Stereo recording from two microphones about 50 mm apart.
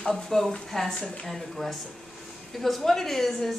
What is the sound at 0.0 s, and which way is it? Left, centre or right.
A woman's voice, centre.